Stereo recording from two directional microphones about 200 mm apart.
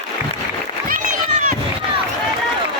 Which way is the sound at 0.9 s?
35° right (ahead or behind).